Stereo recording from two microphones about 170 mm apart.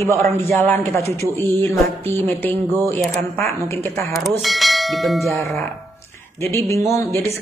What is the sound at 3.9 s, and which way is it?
Speech, centre (ahead or behind).